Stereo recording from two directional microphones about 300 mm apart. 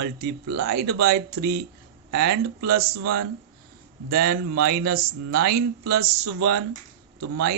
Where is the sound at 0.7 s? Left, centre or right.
Right.